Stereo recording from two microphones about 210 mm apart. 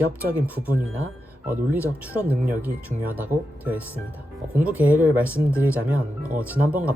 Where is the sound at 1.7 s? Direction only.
10° left (ahead or behind).